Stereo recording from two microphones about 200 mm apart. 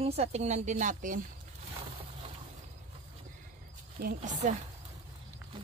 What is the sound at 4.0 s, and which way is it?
Speech, 40° right (ahead or behind).